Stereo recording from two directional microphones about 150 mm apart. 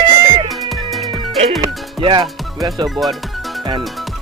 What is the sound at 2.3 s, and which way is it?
Music, centre (ahead or behind).